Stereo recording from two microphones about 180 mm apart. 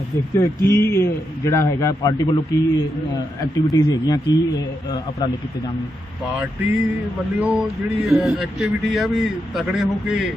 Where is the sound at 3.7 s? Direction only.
20° left (ahead or behind).